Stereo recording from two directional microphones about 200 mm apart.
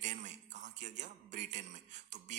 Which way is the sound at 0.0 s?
35° right (ahead or behind).